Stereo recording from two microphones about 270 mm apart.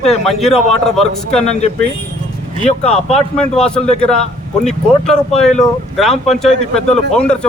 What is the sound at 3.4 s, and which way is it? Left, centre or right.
Speech, centre.